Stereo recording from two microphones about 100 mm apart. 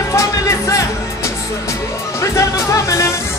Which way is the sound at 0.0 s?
30° left (ahead or behind).